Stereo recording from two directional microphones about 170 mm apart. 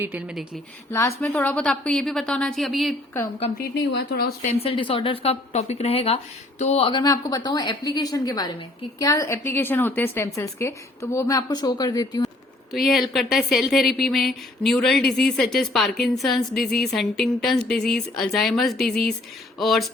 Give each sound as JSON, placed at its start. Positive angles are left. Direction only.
{"t": 0.0, "sound": "speech", "side_deg": -10}
{"t": 0.9, "sound": "a woman's voice", "side_deg": 10}
{"t": 3.6, "sound": "speech", "side_deg": 75}
{"t": 4.6, "sound": "a woman's voice", "side_deg": 30}
{"t": 12.7, "sound": "a woman's voice", "side_deg": 0}